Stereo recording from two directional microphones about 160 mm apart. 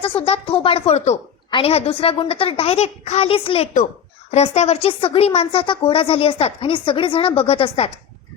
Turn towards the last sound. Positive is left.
turn(degrees=35)  # may be behind; listen again after turning